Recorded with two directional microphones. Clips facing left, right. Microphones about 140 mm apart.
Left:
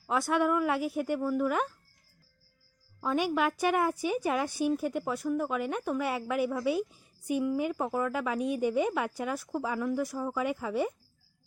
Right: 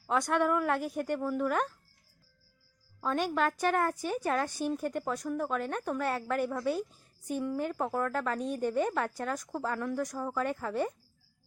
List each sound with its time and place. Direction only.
0.1 s speech: 5° left (ahead or behind)
3.0 s speech: 10° left (ahead or behind)